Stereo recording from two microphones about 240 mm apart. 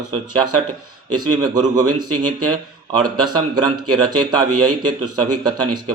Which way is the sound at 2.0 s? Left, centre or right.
Right.